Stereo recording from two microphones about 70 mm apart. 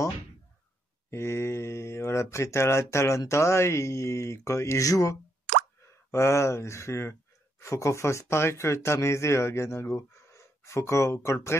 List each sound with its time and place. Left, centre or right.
1.1 s speech: left
6.1 s speech: left